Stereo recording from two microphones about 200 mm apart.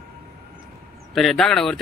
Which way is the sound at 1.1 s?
Centre (ahead or behind).